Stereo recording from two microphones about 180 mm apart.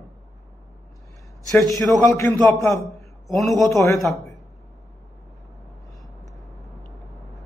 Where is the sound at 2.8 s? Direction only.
Centre (ahead or behind).